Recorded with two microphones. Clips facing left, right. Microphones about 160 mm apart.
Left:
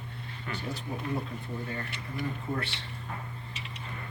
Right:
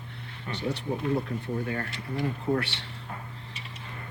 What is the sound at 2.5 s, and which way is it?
Speech, 80° right.